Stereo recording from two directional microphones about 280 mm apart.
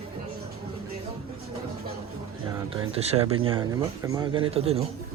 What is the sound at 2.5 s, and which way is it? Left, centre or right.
Speech, centre.